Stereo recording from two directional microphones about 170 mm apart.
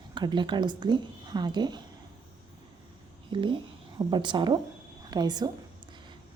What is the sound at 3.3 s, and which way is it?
A woman's voice, 30° right (ahead or behind).